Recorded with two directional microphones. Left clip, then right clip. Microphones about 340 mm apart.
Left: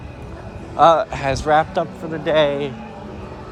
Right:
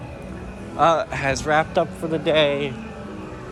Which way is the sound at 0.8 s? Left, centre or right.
Centre.